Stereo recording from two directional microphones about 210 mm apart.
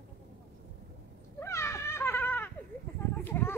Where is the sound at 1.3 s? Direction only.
15° left (ahead or behind).